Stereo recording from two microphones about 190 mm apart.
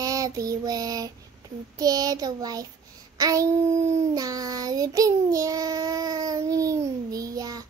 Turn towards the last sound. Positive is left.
turn(degrees=-20)  # may be behind; listen again after turning